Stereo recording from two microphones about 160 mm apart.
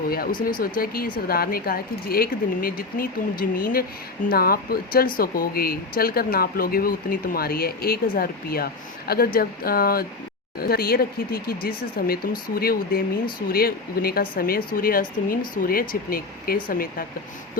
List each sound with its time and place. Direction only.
0.1 s speech: 70° left (ahead or behind)